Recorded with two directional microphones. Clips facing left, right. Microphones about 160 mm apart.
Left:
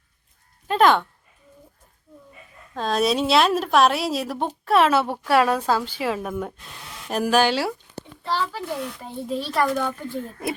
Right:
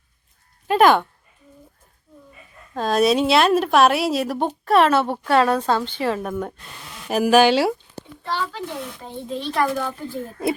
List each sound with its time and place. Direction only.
0.7 s speech: 5° right (ahead or behind)
2.7 s speech: centre (ahead or behind)
8.3 s a child's voice: 10° left (ahead or behind); by 10.2 s 5° right (ahead or behind)